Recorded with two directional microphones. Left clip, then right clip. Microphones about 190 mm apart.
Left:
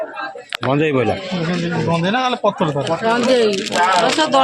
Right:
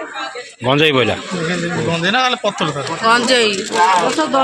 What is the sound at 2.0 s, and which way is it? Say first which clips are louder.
Speech: right 3 dB; 50° left (ahead or behind).